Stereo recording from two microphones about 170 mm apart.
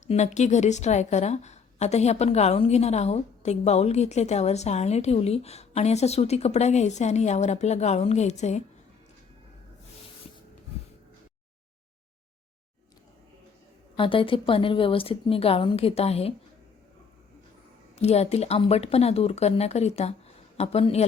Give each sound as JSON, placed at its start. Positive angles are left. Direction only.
{"t": 0.1, "sound": "a woman's voice", "side_deg": 45}
{"t": 13.9, "sound": "a woman's voice", "side_deg": 30}
{"t": 17.9, "sound": "a woman's voice", "side_deg": 40}